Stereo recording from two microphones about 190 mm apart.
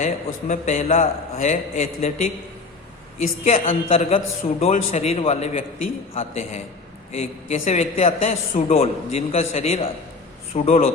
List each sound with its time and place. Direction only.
0.0 s a man's voice: 35° left (ahead or behind)
3.4 s a man's voice: 35° left (ahead or behind)